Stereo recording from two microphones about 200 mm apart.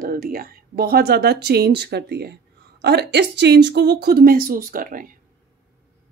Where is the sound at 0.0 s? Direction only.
45° right (ahead or behind).